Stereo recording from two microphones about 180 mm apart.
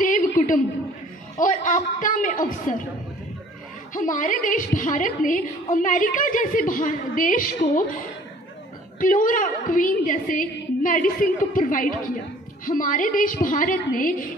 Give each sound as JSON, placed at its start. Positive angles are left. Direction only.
{"t": 0.0, "sound": "a sound", "side_deg": 45}
{"t": 1.4, "sound": "a woman's voice", "side_deg": 45}
{"t": 3.9, "sound": "a woman's voice", "side_deg": 45}
{"t": 9.0, "sound": "a woman's voice", "side_deg": 50}